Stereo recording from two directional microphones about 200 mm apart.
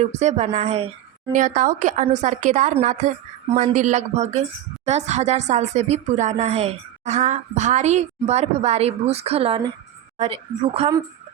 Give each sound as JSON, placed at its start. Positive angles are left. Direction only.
{"t": 0.0, "sound": "speech", "side_deg": -35}